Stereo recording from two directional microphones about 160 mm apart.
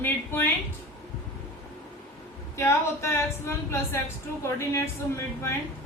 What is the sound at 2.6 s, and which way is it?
Speech, 15° left (ahead or behind).